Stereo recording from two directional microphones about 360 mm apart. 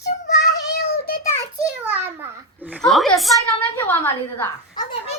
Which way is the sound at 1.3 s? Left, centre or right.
Centre.